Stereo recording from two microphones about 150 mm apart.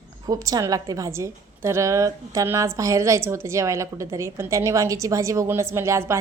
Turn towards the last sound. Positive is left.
turn(degrees=-20)  # may be behind; listen again after turning